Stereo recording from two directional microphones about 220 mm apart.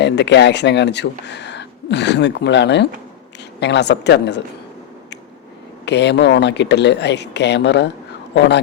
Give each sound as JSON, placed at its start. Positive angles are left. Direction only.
{"t": 0.0, "sound": "speech", "side_deg": 50}
{"t": 5.8, "sound": "speech", "side_deg": 50}